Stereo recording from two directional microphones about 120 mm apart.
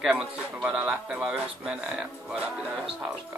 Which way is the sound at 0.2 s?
5° right (ahead or behind).